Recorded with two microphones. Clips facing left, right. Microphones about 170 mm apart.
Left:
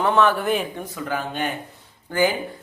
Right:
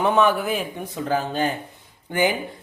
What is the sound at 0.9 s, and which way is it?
Speech, 35° right (ahead or behind).